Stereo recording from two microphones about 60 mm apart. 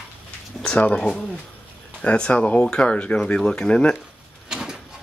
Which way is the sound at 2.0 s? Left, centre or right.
Centre.